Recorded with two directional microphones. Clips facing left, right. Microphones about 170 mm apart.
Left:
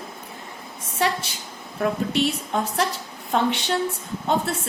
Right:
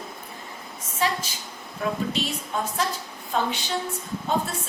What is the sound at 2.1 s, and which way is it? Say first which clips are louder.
A woman's voice: left 5 dB; 70° left (ahead or behind).